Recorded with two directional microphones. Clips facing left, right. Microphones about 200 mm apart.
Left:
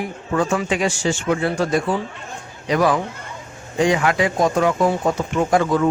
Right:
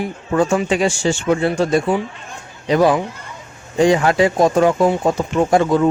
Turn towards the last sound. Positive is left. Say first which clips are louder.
# right 3 dB
turn(degrees=-25)  # may be behind; listen again after turning